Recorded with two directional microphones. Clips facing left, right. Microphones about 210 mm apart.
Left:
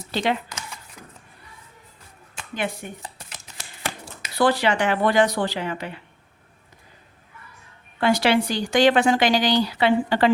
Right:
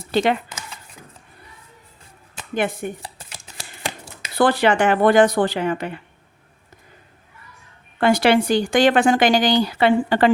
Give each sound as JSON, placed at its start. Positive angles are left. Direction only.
{"t": 0.1, "sound": "speech", "side_deg": -55}
{"t": 2.3, "sound": "a sound", "side_deg": -50}
{"t": 4.4, "sound": "speech", "side_deg": -55}
{"t": 7.9, "sound": "speech", "side_deg": -50}